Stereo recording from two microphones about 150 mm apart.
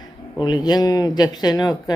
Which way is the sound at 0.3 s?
30° left (ahead or behind).